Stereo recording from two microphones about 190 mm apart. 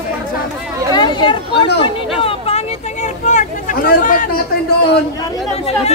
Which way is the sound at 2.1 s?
30° left (ahead or behind).